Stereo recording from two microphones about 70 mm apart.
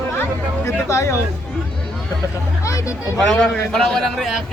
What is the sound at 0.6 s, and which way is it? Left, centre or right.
Speech, left.